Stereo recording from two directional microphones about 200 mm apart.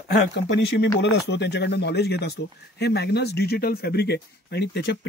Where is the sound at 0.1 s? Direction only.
55° left (ahead or behind).